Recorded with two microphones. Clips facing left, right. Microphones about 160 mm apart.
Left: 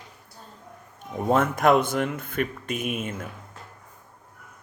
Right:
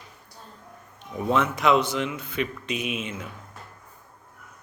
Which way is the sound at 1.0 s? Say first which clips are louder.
Left 2 dB; 45° left (ahead or behind).